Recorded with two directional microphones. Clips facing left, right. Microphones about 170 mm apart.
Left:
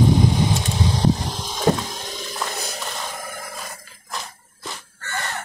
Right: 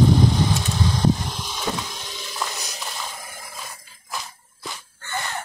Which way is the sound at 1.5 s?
45° left (ahead or behind).